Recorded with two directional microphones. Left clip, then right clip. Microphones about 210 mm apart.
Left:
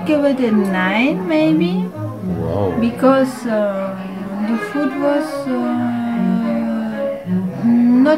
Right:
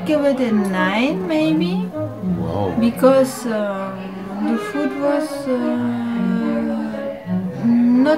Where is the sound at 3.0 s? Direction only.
40° right (ahead or behind).